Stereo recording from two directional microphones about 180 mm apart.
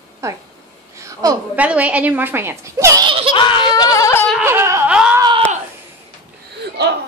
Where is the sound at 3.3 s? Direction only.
25° left (ahead or behind).